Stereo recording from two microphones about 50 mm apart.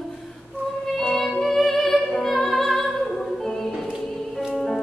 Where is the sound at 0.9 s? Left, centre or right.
Centre.